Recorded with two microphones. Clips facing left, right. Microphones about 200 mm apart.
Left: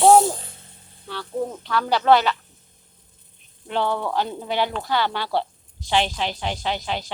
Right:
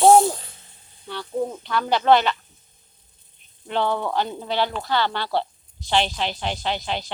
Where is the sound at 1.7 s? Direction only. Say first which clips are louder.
Even; 5° left (ahead or behind).